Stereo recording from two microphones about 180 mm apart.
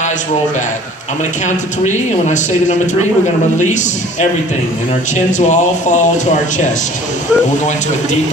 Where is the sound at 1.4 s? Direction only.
40° left (ahead or behind).